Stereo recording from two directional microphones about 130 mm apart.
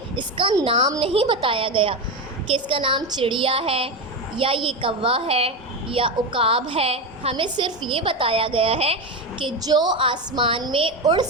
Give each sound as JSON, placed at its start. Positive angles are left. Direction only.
{"t": 0.2, "sound": "a woman's voice", "side_deg": -40}
{"t": 9.6, "sound": "a woman's voice", "side_deg": -35}